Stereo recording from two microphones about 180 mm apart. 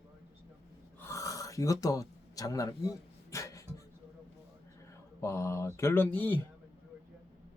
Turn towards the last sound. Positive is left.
turn(degrees=10)  # may be behind; listen again after turning